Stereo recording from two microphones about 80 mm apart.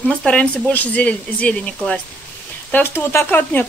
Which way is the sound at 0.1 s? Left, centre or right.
Centre.